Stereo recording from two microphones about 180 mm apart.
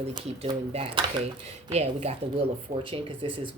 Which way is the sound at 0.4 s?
30° right (ahead or behind).